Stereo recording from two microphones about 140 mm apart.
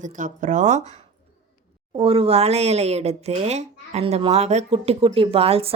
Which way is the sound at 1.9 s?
45° right (ahead or behind).